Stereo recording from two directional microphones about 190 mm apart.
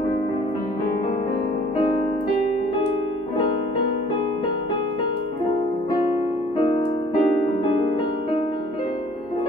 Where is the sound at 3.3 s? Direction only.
25° left (ahead or behind).